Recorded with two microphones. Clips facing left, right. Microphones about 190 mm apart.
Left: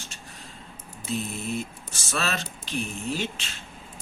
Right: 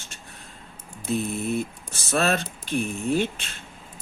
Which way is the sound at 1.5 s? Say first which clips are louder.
Right 4 dB; 55° right (ahead or behind).